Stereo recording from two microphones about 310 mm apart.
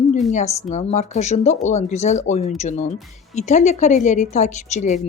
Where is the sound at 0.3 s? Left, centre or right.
Left.